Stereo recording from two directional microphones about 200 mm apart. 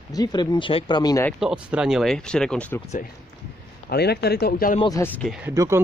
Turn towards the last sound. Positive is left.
turn(degrees=-15)  # may be behind; listen again after turning